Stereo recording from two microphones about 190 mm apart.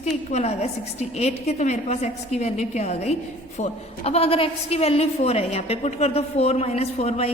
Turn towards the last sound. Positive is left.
turn(degrees=35)  # may be behind; listen again after turning